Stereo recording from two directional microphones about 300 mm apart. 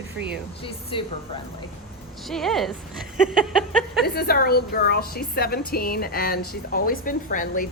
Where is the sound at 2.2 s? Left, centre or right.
Centre.